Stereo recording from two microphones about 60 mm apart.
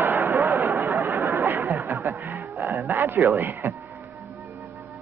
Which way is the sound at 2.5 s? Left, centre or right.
Right.